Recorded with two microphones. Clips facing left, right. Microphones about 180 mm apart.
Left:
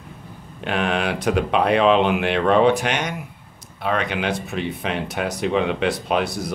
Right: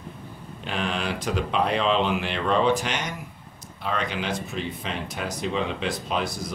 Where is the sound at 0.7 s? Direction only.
65° left (ahead or behind).